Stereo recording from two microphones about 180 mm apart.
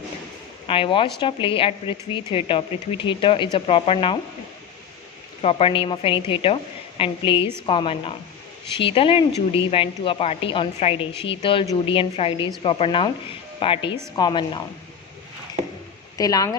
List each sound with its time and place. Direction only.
0.7 s speech: 30° left (ahead or behind)
5.4 s a woman's voice: 35° left (ahead or behind)
15.6 s a sound: 45° right (ahead or behind)
16.1 s speech: 20° left (ahead or behind)